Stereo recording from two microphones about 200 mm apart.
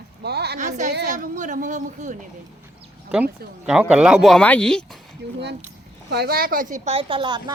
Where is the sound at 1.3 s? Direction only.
40° right (ahead or behind).